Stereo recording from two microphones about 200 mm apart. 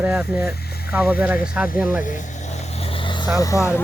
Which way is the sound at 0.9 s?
5° right (ahead or behind).